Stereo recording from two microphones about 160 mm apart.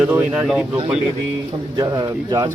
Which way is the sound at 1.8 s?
25° right (ahead or behind).